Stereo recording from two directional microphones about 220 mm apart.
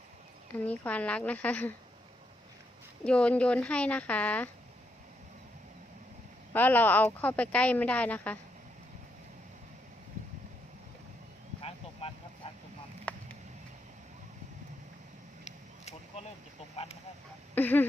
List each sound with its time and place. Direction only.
0.5 s speech: 5° left (ahead or behind)
3.0 s a woman's voice: 5° left (ahead or behind)
6.5 s speech: 10° left (ahead or behind)
13.1 s a sound: 5° left (ahead or behind)
15.4 s a sound: 30° left (ahead or behind)
16.8 s speech: 25° left (ahead or behind)
17.5 s speech: 10° left (ahead or behind)